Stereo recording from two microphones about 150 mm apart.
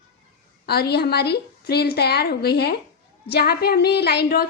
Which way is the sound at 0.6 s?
90° left.